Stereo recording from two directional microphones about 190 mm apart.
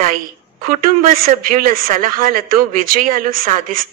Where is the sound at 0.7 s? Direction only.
50° right (ahead or behind).